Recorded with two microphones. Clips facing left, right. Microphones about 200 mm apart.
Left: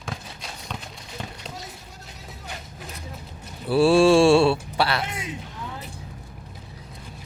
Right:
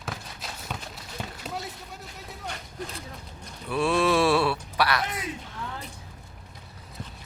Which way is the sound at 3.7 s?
30° left (ahead or behind).